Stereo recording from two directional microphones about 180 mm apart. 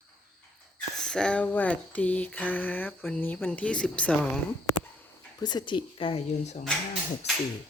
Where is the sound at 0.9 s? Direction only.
5° left (ahead or behind).